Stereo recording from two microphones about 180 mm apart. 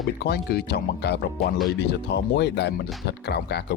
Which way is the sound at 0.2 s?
65° left (ahead or behind).